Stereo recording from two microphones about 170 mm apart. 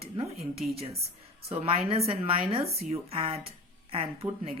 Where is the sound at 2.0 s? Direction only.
35° right (ahead or behind).